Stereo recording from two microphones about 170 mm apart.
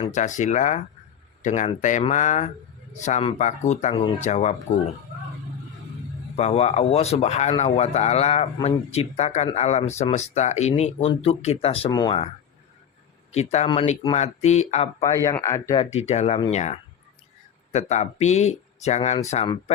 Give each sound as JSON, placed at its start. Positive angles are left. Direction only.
{"t": 0.0, "sound": "speech", "side_deg": 45}
{"t": 6.3, "sound": "speech", "side_deg": 40}
{"t": 13.3, "sound": "speech", "side_deg": 40}
{"t": 15.0, "sound": "speech", "side_deg": 20}
{"t": 15.8, "sound": "speech", "side_deg": 40}